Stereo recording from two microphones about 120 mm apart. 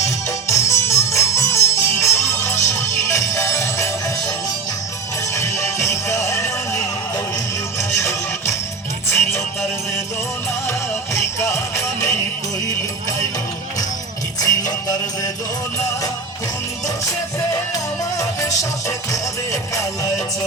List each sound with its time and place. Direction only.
0.3 s music: 25° left (ahead or behind)
1.7 s music: 75° left (ahead or behind)
2.3 s music: 25° left (ahead or behind)
10.7 s music: 25° left (ahead or behind)
14.4 s music: 30° left (ahead or behind)
18.2 s music: 25° left (ahead or behind)